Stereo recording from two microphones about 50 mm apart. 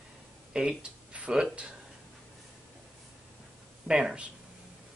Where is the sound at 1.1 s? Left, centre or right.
Right.